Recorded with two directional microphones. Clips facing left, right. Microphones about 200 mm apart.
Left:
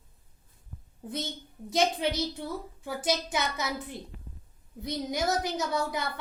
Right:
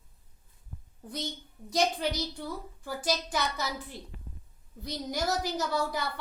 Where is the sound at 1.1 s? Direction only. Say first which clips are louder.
Left 2 dB; 25° left (ahead or behind).